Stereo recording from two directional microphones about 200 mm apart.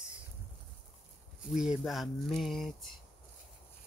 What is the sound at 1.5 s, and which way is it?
Speech, centre (ahead or behind).